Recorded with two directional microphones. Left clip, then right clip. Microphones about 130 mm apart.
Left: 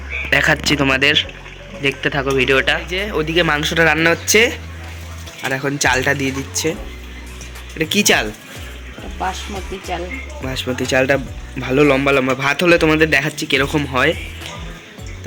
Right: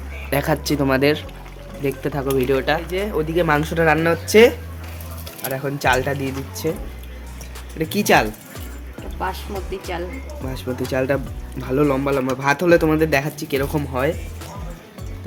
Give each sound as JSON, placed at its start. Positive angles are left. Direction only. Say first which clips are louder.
{"t": 0.3, "sound": "speech", "louder": "left 6 dB", "side_deg": -25}
{"t": 5.4, "sound": "speech", "louder": "left 5 dB", "side_deg": 5}
{"t": 6.5, "sound": "speech", "louder": "left 2 dB", "side_deg": -10}
{"t": 7.8, "sound": "speech", "louder": "left 2 dB", "side_deg": -10}
{"t": 10.4, "sound": "speech", "louder": "left 5 dB", "side_deg": -5}
{"t": 12.5, "sound": "speech", "louder": "left 4 dB", "side_deg": -15}